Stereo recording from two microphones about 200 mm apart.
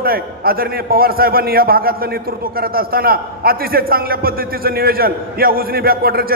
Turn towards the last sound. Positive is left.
turn(degrees=-50)  # may be behind; listen again after turning